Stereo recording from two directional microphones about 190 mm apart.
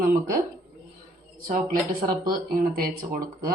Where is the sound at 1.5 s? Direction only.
50° right (ahead or behind).